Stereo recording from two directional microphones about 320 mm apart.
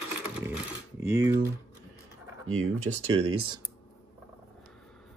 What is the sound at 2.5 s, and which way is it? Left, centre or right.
Speech, right.